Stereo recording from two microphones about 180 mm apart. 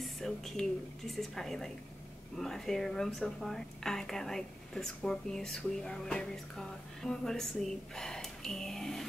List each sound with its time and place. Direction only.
0.0 s a woman's voice: centre (ahead or behind)